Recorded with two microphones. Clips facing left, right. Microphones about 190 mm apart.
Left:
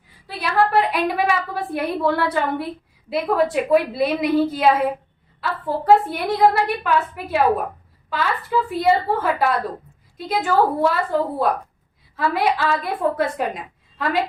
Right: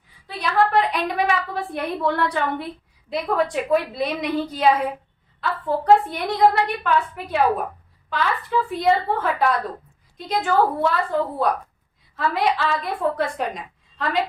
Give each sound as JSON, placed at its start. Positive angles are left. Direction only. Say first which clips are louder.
{"t": 0.3, "sound": "a woman's voice", "louder": "left 1 dB", "side_deg": 5}
{"t": 12.1, "sound": "a woman's voice", "louder": "left 1 dB", "side_deg": 0}